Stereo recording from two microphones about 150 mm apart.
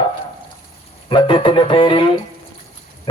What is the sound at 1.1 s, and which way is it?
Speech, 35° left (ahead or behind).